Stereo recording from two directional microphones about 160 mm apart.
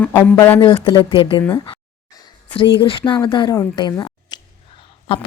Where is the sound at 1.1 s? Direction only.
35° left (ahead or behind).